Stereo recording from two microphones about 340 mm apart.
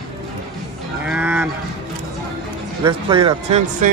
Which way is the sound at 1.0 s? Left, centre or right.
Centre.